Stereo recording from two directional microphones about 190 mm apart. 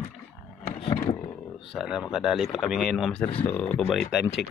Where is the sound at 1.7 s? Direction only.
Centre (ahead or behind).